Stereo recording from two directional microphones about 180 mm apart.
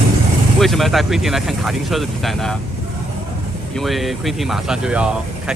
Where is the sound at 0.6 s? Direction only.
Centre (ahead or behind).